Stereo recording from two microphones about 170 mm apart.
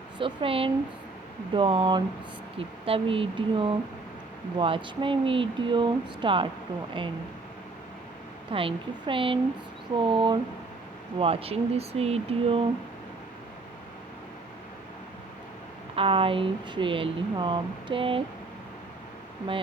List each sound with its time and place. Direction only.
0.2 s speech: 30° right (ahead or behind)
8.4 s speech: 30° right (ahead or behind)
16.0 s speech: 30° right (ahead or behind)